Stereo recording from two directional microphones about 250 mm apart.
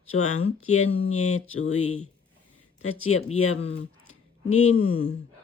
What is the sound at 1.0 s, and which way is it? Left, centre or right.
Speech, left.